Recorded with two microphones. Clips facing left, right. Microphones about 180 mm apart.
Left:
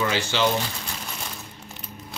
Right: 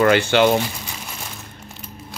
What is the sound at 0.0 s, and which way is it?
Speech, 60° right (ahead or behind).